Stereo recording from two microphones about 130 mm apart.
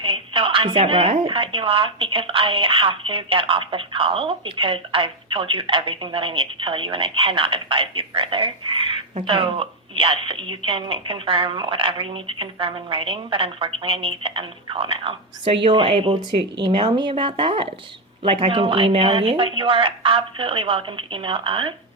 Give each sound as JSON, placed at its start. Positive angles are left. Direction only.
{"t": 0.0, "sound": "a woman's voice", "side_deg": -45}
{"t": 15.9, "sound": "speech", "side_deg": -60}
{"t": 16.6, "sound": "a woman's voice", "side_deg": -40}